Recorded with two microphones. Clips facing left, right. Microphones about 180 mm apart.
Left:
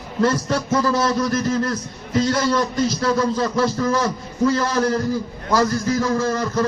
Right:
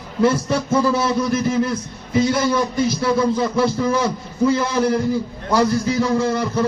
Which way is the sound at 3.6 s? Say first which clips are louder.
Right 1 dB; 20° right (ahead or behind).